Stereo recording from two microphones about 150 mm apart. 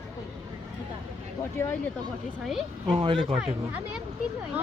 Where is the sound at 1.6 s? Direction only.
20° left (ahead or behind).